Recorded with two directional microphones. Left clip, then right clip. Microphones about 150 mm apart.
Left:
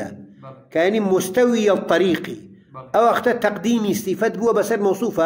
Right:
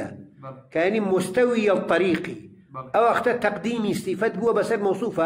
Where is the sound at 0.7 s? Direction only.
30° left (ahead or behind).